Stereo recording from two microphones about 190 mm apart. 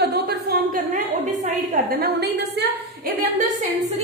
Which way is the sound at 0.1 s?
55° right (ahead or behind).